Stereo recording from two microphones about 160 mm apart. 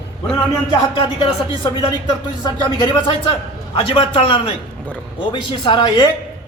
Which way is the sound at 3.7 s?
35° left (ahead or behind).